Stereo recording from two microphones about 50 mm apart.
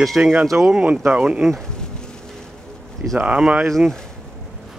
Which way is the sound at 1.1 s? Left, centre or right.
Right.